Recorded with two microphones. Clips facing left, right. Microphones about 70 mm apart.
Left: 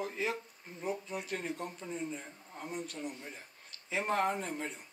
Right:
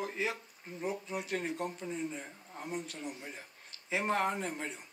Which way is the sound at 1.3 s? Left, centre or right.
Right.